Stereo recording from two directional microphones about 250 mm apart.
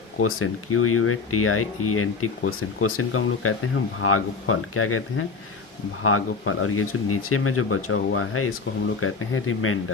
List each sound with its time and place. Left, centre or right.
0.2 s speech: left